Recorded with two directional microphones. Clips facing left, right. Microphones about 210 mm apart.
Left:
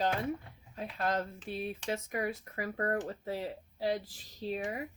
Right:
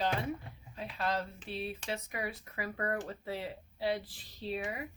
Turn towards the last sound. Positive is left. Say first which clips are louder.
# left 2 dB
turn(degrees=40)  # may be behind; listen again after turning